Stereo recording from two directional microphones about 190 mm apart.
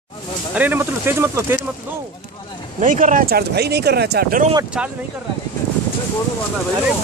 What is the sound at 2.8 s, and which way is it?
Speech, 45° right (ahead or behind).